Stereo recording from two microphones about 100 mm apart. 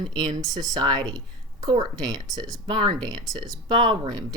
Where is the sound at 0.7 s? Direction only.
45° right (ahead or behind).